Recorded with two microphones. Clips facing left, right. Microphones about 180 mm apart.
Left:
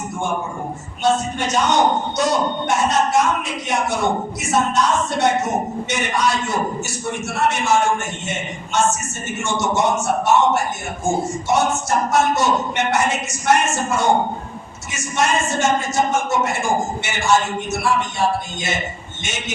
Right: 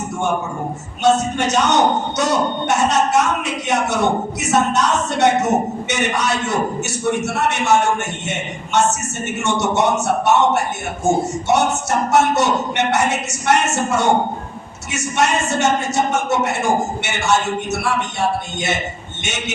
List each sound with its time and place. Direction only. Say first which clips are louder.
1.0 s a man's voice: right 3 dB; 70° right (ahead or behind)
9.2 s a man's voice: right 2 dB; 65° right (ahead or behind)
19.2 s a man's voice: right 2 dB; 70° right (ahead or behind)